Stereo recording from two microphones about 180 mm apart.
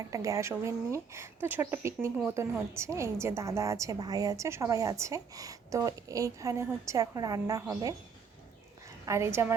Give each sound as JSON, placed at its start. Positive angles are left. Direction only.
{"t": 0.1, "sound": "a woman's voice", "side_deg": -20}
{"t": 9.0, "sound": "a woman's voice", "side_deg": -15}